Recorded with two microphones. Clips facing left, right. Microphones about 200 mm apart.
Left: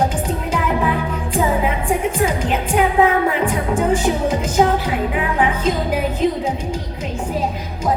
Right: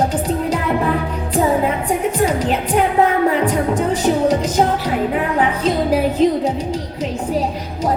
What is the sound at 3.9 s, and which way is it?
Music, 35° right (ahead or behind).